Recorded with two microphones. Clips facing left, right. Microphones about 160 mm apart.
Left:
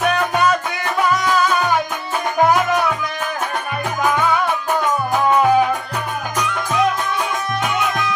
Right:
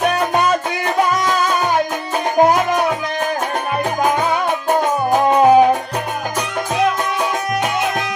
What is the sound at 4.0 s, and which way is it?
Music, 40° right (ahead or behind).